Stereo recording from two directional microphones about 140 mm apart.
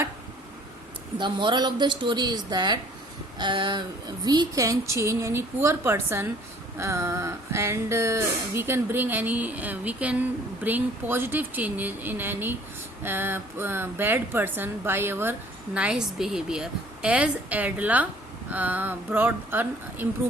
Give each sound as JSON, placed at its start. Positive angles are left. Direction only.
{"t": 1.2, "sound": "a woman's voice", "side_deg": -35}